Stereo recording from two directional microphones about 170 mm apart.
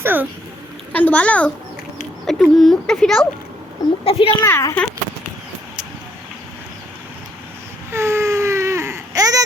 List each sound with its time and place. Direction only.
0.0 s a sound: 10° right (ahead or behind)
0.9 s speech: 10° left (ahead or behind)
4.0 s speech: 35° left (ahead or behind)
4.4 s speech: 15° left (ahead or behind)
7.9 s baby cry: 15° right (ahead or behind)